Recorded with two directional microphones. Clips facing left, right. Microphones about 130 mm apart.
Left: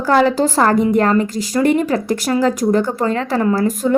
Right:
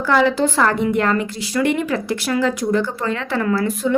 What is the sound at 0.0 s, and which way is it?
A woman's voice, 40° left (ahead or behind).